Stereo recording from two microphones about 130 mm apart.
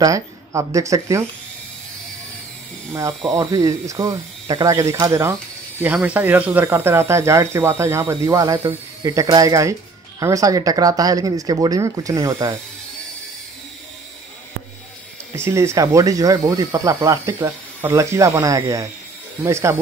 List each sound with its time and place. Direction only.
0.0 s speech: 25° right (ahead or behind)
2.9 s speech: 25° right (ahead or behind)
15.3 s speech: 20° right (ahead or behind)